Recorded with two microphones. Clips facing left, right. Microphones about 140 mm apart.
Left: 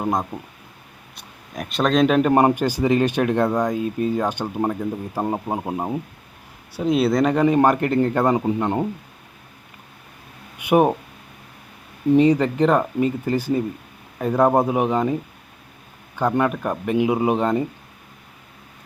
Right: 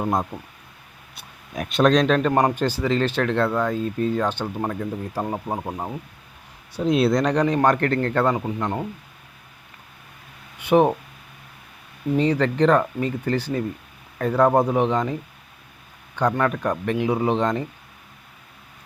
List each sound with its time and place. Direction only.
0.1 s speech: 5° right (ahead or behind); by 6.0 s 20° left (ahead or behind)
6.7 s speech: centre (ahead or behind)
8.4 s speech: 25° left (ahead or behind)
10.6 s speech: 10° left (ahead or behind)
12.1 s speech: 10° left (ahead or behind)
16.5 s speech: 10° left (ahead or behind)